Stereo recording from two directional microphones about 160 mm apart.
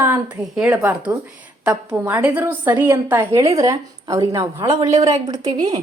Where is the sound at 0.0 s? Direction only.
15° right (ahead or behind).